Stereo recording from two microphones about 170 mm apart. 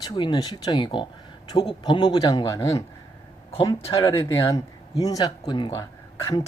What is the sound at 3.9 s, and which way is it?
Speech, 20° left (ahead or behind).